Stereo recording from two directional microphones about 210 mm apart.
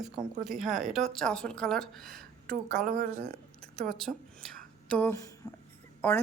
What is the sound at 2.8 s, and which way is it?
Speech, 40° right (ahead or behind).